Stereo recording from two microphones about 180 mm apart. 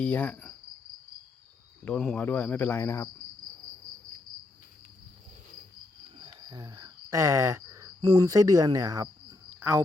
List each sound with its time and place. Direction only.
0.0 s cricket: 5° left (ahead or behind)
1.8 s cricket: 5° left (ahead or behind)
6.1 s speech: 25° right (ahead or behind)
9.6 s a sound: 15° right (ahead or behind)